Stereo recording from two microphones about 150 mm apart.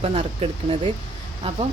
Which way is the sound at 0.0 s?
40° right (ahead or behind).